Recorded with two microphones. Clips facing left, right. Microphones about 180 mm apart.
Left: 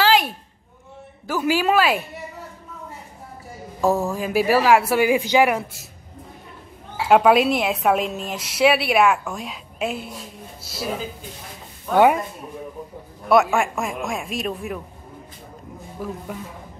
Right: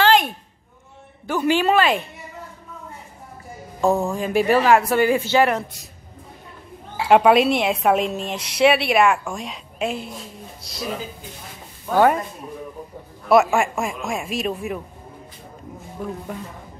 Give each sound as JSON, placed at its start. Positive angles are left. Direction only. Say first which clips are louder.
{"t": 0.0, "sound": "a sound", "louder": "right 1 dB", "side_deg": 5}
{"t": 1.2, "sound": "a woman's voice", "louder": "right 1 dB", "side_deg": 5}
{"t": 3.8, "sound": "speech", "louder": "right 1 dB", "side_deg": 5}
{"t": 7.1, "sound": "a woman's voice", "louder": "right 1 dB", "side_deg": 0}
{"t": 11.9, "sound": "speech", "louder": "left 1 dB", "side_deg": 15}
{"t": 13.3, "sound": "a woman's voice", "louder": "right 1 dB", "side_deg": 0}
{"t": 16.0, "sound": "a woman's voice", "louder": "right 1 dB", "side_deg": 5}